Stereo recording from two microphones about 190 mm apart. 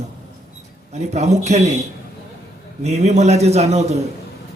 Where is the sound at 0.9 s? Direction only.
35° right (ahead or behind).